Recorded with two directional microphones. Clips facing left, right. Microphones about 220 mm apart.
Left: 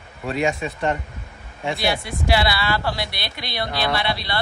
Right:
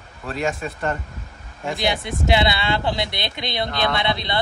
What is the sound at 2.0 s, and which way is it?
Speech, 20° right (ahead or behind).